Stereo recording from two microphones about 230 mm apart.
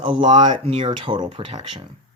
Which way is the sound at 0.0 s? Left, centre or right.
Right.